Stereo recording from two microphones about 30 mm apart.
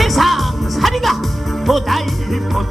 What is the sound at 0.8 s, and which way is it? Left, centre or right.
Speech, centre.